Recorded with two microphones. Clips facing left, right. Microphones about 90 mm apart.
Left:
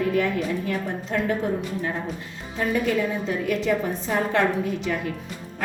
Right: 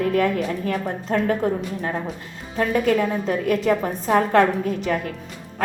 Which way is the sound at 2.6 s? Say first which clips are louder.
Right 4 dB; 50° right (ahead or behind).